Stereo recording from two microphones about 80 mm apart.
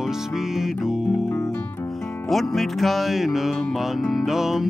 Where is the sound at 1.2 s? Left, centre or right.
Left.